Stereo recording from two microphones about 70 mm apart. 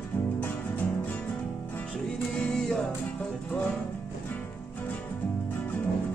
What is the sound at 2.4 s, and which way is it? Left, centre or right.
Music, centre.